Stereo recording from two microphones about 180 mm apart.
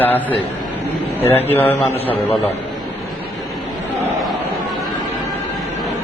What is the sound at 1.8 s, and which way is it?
Speech, 35° left (ahead or behind).